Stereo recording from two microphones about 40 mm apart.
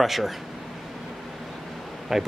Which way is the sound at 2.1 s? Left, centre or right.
Centre.